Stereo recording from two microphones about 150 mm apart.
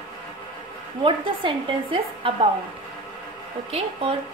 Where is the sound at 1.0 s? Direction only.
35° right (ahead or behind).